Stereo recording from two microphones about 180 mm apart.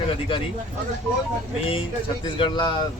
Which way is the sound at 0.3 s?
30° left (ahead or behind).